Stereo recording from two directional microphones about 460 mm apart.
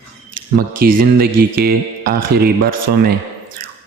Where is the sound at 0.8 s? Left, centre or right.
Centre.